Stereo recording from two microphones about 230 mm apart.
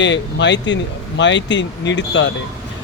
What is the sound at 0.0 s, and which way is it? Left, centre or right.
Speech, left.